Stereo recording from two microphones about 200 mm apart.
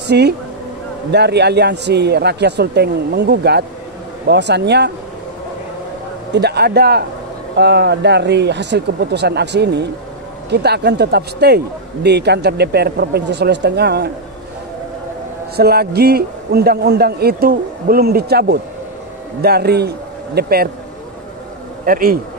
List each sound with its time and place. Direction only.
0.0 s a man's voice: 55° right (ahead or behind)
6.3 s a man's voice: 55° right (ahead or behind)
15.5 s a man's voice: 55° right (ahead or behind)
21.8 s a man's voice: 45° right (ahead or behind)